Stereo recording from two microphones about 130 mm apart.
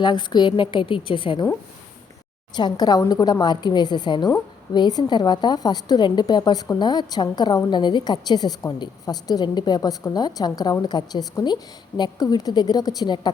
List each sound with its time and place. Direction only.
0.0 s a woman's voice: 35° left (ahead or behind)
2.6 s a woman's voice: 30° left (ahead or behind)